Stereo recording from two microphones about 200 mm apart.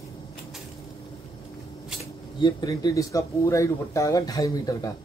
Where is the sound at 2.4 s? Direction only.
20° left (ahead or behind).